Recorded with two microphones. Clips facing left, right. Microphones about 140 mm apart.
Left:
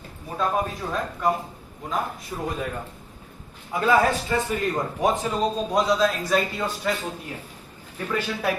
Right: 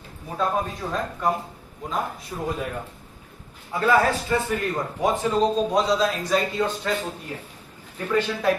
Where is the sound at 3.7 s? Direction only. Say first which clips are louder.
Even; 20° left (ahead or behind).